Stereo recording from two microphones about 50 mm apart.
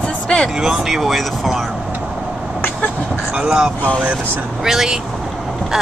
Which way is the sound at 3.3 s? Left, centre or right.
Centre.